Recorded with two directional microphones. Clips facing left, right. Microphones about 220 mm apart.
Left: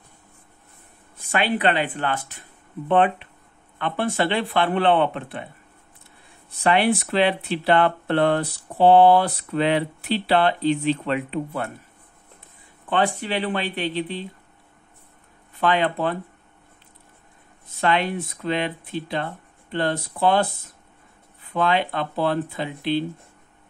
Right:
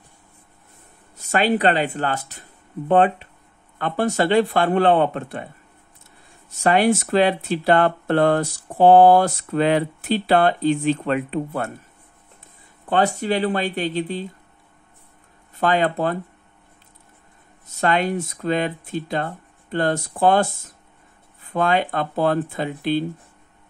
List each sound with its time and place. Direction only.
1.3 s speech: 40° right (ahead or behind)
6.6 s speech: 45° right (ahead or behind)
12.8 s speech: 40° right (ahead or behind)
15.5 s speech: 45° right (ahead or behind)
17.6 s speech: 45° right (ahead or behind)